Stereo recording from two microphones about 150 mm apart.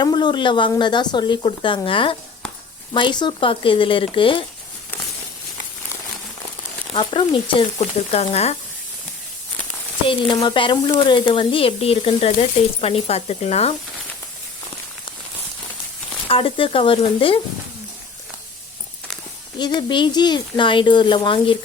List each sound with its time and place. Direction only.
0.0 s speech: 30° left (ahead or behind)
6.9 s speech: 35° left (ahead or behind)
7.8 s speech: 45° left (ahead or behind)
10.1 s speech: 30° left (ahead or behind)
16.3 s speech: 35° left (ahead or behind)
19.5 s speech: 30° left (ahead or behind)